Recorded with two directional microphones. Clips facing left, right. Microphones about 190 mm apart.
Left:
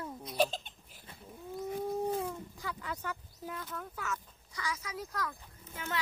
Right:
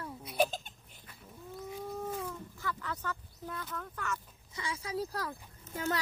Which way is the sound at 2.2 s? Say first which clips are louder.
Even; 15° left (ahead or behind).